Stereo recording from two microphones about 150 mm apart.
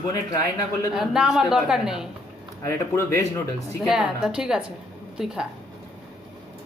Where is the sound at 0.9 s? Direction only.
5° right (ahead or behind).